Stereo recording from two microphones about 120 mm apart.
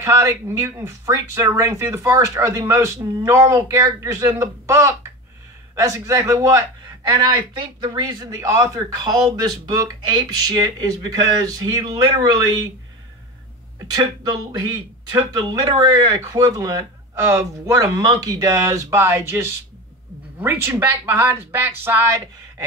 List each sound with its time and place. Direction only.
0.0 s speech: 25° right (ahead or behind)
15.1 s speech: 35° right (ahead or behind)